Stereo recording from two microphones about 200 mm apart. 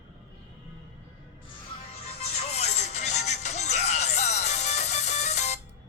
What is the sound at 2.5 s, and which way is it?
Music, 35° left (ahead or behind).